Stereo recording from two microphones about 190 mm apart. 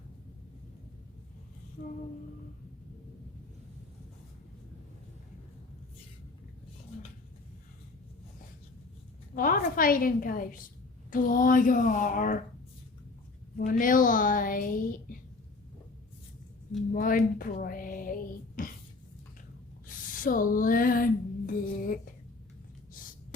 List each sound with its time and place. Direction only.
9.3 s speech: 45° left (ahead or behind)
13.6 s speech: 45° left (ahead or behind)
16.9 s speech: 45° left (ahead or behind)
19.9 s a sound: 45° left (ahead or behind)